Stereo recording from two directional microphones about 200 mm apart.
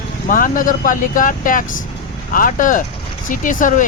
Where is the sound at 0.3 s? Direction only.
45° left (ahead or behind).